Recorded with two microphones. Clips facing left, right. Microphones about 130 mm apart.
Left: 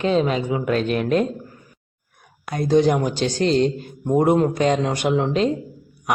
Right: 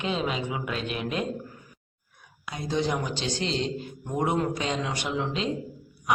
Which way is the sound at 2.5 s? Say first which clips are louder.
Left 11 dB; 55° left (ahead or behind).